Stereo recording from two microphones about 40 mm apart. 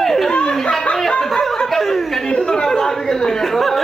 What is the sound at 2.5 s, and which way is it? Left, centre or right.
Chatter, centre.